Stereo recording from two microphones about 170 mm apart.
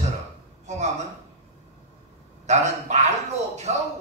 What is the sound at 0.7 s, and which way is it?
Speech, 40° right (ahead or behind).